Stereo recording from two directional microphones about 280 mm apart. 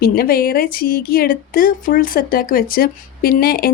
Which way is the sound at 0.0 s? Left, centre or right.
Left.